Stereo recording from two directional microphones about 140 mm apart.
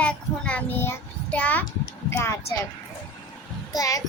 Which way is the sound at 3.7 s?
25° left (ahead or behind).